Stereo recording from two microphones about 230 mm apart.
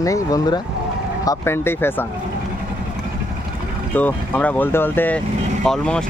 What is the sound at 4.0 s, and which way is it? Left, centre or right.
Speech, centre.